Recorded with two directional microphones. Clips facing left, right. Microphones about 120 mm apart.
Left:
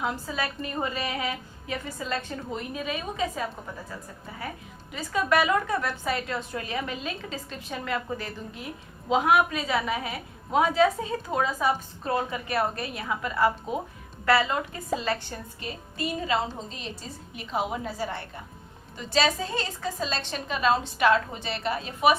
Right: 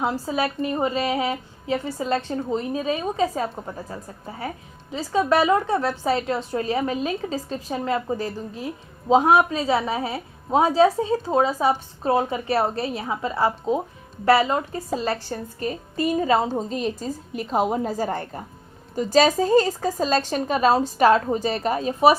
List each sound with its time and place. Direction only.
0.0 s a woman's voice: 30° right (ahead or behind)